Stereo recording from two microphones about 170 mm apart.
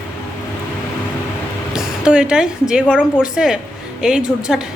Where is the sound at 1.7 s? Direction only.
5° right (ahead or behind).